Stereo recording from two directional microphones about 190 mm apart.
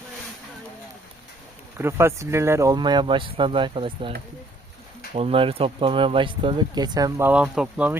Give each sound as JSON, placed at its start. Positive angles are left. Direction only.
{"t": 1.8, "sound": "speech", "side_deg": -15}
{"t": 5.1, "sound": "speech", "side_deg": -30}